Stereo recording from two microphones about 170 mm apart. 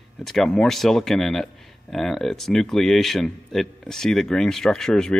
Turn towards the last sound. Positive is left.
turn(degrees=5)  # may be behind; listen again after turning